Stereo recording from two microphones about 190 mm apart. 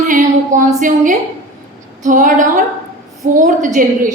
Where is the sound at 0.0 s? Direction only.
40° right (ahead or behind).